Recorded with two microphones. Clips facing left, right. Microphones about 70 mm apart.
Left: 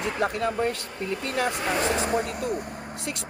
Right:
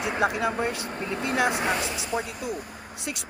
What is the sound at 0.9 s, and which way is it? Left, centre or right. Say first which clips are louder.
Speech: even; right.